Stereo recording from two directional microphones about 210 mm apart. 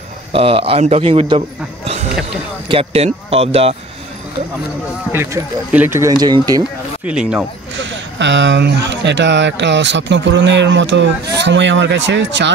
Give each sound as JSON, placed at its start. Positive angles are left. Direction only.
{"t": 0.3, "sound": "a man's voice", "side_deg": -25}
{"t": 2.7, "sound": "a man's voice", "side_deg": -30}
{"t": 5.1, "sound": "speech", "side_deg": -10}
{"t": 7.1, "sound": "speech", "side_deg": -5}
{"t": 7.7, "sound": "speech", "side_deg": -60}